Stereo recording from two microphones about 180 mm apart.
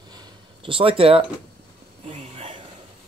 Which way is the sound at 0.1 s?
25° right (ahead or behind).